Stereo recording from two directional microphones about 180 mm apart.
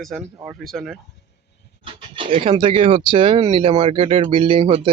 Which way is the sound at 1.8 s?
30° right (ahead or behind).